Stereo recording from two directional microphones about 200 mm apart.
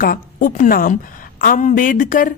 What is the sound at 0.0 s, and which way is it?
Speech, 45° left (ahead or behind).